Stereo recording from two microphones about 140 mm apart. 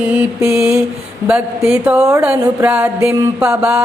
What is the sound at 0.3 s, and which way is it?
Mantra, 20° right (ahead or behind).